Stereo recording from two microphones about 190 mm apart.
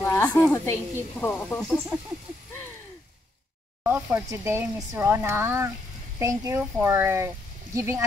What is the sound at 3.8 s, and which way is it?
Speech, 10° right (ahead or behind).